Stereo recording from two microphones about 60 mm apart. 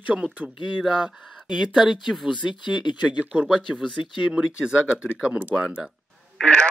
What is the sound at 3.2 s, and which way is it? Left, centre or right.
A man's voice, centre.